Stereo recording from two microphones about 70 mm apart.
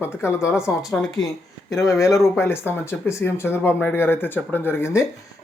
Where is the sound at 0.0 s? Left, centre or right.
Left.